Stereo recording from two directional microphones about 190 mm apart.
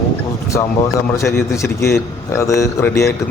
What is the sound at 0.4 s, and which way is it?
A man's voice, 15° left (ahead or behind).